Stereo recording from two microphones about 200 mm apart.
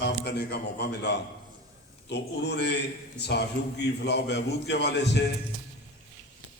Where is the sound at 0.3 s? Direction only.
55° left (ahead or behind).